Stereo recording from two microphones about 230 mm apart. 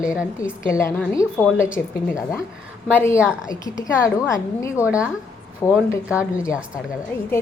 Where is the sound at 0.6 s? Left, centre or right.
Centre.